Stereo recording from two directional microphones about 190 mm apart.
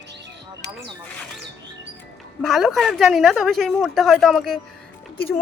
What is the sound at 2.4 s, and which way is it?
Speech, centre (ahead or behind).